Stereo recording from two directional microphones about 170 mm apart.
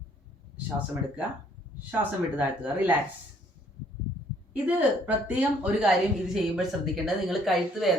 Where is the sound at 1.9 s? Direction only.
10° right (ahead or behind).